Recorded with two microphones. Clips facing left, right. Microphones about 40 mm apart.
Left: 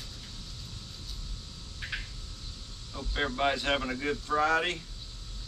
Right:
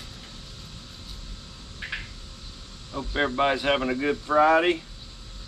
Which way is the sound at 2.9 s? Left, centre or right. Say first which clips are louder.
Right 7 dB; right.